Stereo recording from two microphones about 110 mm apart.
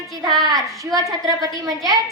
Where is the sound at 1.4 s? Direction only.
35° right (ahead or behind).